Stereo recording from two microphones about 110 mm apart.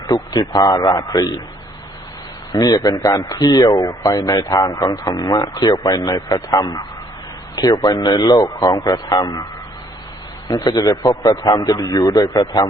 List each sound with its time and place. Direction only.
0.1 s speech: 40° left (ahead or behind)
2.5 s speech: 35° left (ahead or behind)
10.5 s speech: 35° left (ahead or behind)